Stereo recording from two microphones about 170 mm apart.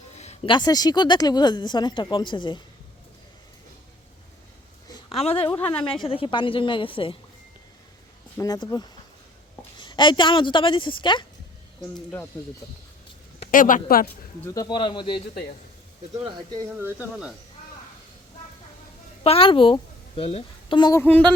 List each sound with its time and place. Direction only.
0.2 s a sound: 40° left (ahead or behind)
0.5 s speech: 25° left (ahead or behind)
4.9 s a sound: 35° left (ahead or behind)
5.7 s a woman's voice: 30° left (ahead or behind)
8.4 s speech: 25° left (ahead or behind)
11.9 s speech: 10° left (ahead or behind)
13.5 s a woman's voice: 50° left (ahead or behind)
14.4 s speech: 20° left (ahead or behind)
16.6 s speech: 10° right (ahead or behind)
19.2 s a woman's voice: 35° left (ahead or behind)
21.0 s speech: 10° left (ahead or behind)